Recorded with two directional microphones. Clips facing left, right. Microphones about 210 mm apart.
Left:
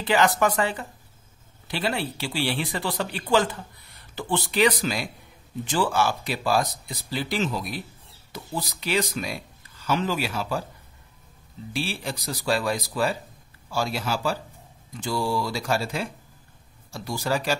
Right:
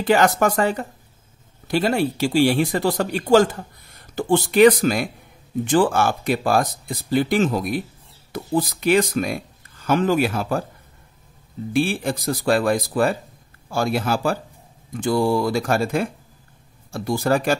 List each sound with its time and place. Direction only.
0.0 s speech: 45° right (ahead or behind)
11.7 s speech: 55° right (ahead or behind)